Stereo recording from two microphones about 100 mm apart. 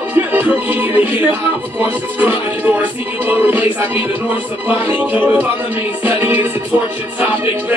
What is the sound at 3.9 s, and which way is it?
Speech, 15° right (ahead or behind).